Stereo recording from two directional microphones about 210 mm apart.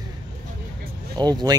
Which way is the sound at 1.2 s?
20° right (ahead or behind).